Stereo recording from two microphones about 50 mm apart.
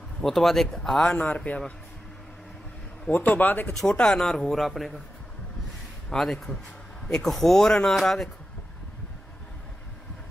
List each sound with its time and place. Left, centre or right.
0.2 s speech: centre
1.1 s speech: left
3.1 s speech: left
4.0 s a man's voice: centre
6.1 s a man's voice: centre